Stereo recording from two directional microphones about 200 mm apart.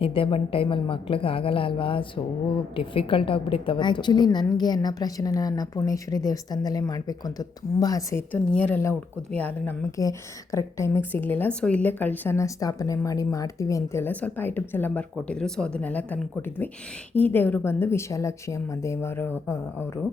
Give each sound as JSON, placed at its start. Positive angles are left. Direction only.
{"t": 0.0, "sound": "a woman's voice", "side_deg": 25}